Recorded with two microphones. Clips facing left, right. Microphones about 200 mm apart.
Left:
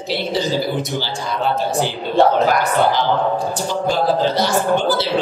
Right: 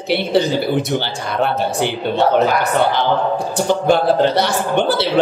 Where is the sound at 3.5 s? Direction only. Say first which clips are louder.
Right 5 dB; 60° right (ahead or behind).